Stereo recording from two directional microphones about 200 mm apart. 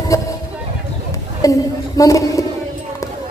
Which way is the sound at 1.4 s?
15° left (ahead or behind).